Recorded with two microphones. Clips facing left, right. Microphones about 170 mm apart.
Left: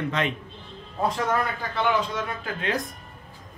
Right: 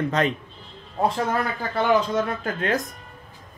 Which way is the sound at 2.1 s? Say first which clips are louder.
Right 6 dB; 45° right (ahead or behind).